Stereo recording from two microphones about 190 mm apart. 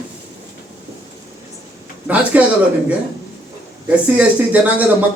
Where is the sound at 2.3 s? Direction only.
5° right (ahead or behind).